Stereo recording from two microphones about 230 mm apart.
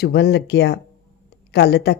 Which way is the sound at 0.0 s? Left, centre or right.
Left.